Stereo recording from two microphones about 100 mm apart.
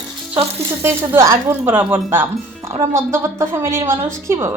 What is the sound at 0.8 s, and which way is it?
A woman's voice, 25° right (ahead or behind).